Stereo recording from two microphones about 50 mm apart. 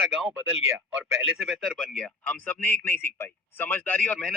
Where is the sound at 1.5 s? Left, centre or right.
Centre.